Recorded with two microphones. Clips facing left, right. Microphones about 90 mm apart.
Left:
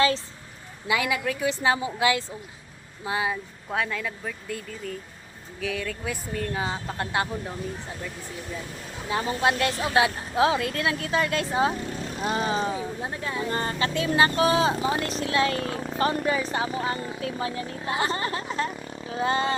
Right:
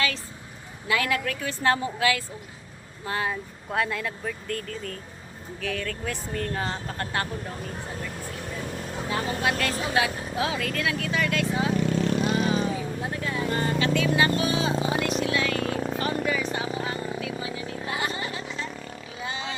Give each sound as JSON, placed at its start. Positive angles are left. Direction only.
{"t": 0.9, "sound": "speech", "side_deg": 15}
{"t": 9.0, "sound": "a woman's voice", "side_deg": 25}
{"t": 16.0, "sound": "a sound", "side_deg": 35}